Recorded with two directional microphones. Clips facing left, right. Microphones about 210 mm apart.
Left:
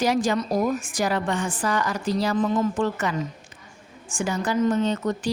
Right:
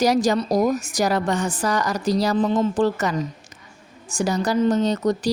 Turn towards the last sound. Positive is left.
turn(degrees=-40)  # may be behind; listen again after turning